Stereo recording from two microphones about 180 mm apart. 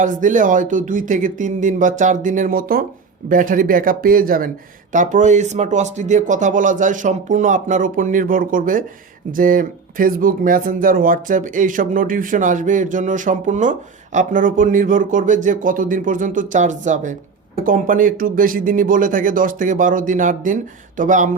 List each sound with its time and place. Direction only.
0.0 s speech: 45° right (ahead or behind)